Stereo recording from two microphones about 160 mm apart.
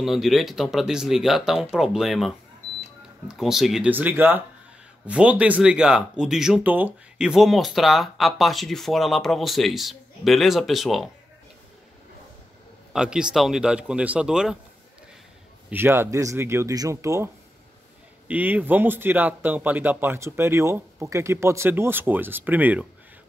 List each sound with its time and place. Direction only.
0.0 s speech: centre (ahead or behind)
12.9 s speech: 5° right (ahead or behind)
15.7 s speech: 15° right (ahead or behind)
18.3 s speech: 10° right (ahead or behind)